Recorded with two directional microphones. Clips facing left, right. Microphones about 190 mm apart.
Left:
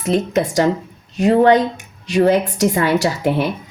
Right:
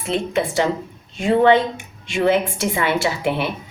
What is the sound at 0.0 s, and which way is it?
A woman's voice, 40° left (ahead or behind).